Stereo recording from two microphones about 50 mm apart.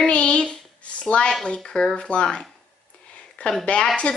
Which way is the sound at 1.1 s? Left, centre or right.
Centre.